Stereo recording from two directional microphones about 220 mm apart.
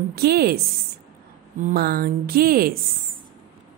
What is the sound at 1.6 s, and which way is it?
Speech, 45° right (ahead or behind).